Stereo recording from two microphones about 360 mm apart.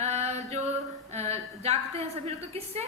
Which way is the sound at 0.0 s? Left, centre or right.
Centre.